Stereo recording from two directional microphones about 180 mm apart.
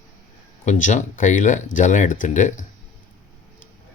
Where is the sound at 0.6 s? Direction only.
45° left (ahead or behind).